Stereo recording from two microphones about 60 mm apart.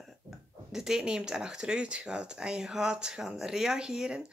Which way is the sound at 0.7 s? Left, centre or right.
Centre.